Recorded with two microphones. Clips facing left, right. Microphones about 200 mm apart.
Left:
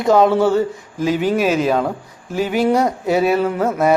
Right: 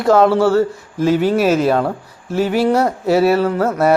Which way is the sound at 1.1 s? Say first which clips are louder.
Right 3 dB; 40° right (ahead or behind).